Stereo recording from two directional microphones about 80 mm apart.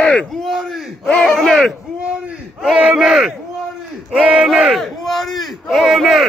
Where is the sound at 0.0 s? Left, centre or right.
Centre.